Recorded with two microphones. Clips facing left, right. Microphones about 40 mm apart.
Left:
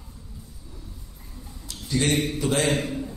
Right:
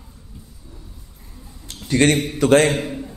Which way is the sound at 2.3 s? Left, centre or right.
Right.